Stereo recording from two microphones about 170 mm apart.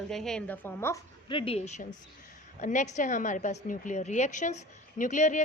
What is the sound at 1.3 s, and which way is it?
A woman's voice, 35° left (ahead or behind).